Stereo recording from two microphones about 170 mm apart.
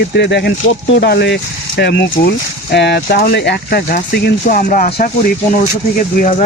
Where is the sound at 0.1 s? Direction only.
85° left; by 4.9 s 50° left (ahead or behind).